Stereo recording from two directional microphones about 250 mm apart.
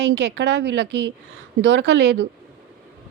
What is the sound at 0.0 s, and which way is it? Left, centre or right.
A woman's voice, right.